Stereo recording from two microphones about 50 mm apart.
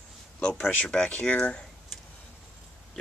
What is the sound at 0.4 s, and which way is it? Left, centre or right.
Speech, left.